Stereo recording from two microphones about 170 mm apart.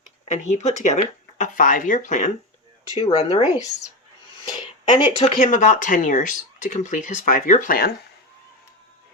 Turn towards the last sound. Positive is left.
turn(degrees=55)  # may be behind; listen again after turning